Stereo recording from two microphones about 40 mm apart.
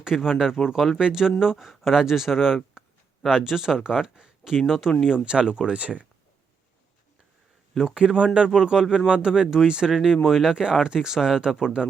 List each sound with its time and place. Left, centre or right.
0.0 s speech: centre
2.8 s a sound: centre
3.2 s speech: centre
5.0 s speech: right
7.9 s speech: right